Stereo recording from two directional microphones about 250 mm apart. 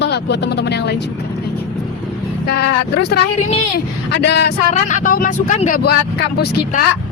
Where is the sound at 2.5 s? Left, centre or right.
Left.